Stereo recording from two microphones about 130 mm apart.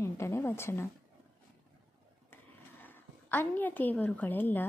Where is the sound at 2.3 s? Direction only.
15° left (ahead or behind).